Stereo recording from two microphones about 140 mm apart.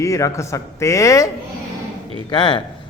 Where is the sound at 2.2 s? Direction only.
35° left (ahead or behind).